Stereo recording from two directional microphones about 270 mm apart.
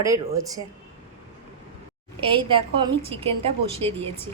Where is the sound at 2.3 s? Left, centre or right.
Centre.